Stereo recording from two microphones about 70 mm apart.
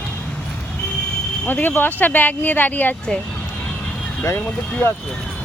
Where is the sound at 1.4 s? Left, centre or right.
Left.